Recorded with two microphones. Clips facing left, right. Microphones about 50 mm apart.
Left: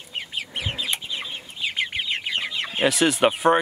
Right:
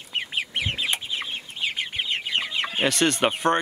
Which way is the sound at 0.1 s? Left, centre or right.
Right.